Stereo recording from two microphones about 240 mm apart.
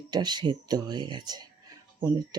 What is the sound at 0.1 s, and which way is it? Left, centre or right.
Speech, centre.